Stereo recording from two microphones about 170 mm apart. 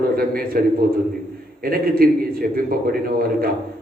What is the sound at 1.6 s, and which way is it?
A man's voice, 60° right (ahead or behind).